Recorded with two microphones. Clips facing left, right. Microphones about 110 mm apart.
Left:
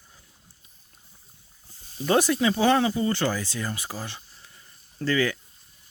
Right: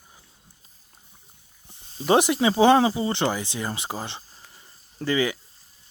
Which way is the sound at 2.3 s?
25° right (ahead or behind).